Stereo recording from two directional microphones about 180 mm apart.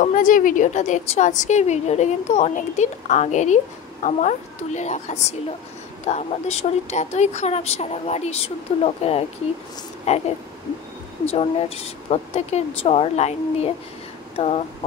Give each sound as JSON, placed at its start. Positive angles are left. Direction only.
{"t": 0.0, "sound": "a woman's voice", "side_deg": 45}
{"t": 11.2, "sound": "a woman's voice", "side_deg": 35}